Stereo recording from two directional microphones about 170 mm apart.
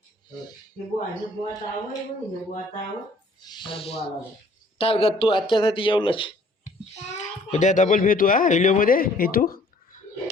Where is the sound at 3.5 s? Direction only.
30° left (ahead or behind).